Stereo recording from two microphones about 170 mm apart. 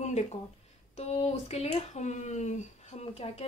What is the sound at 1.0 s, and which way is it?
A woman's voice, 40° left (ahead or behind).